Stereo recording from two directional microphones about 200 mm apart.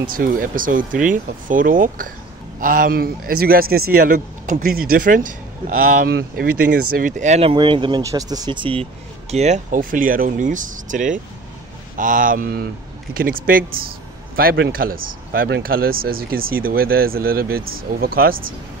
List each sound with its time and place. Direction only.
0.1 s a man's voice: 45° right (ahead or behind)
7.0 s a man's voice: 40° right (ahead or behind)